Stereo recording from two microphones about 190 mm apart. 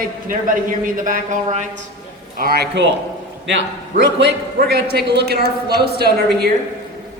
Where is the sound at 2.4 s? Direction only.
55° right (ahead or behind).